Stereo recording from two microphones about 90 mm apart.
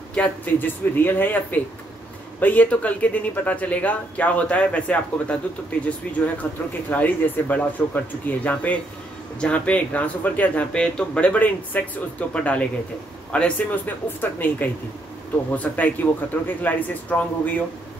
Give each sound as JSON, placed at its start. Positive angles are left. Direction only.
{"t": 0.1, "sound": "speech", "side_deg": 15}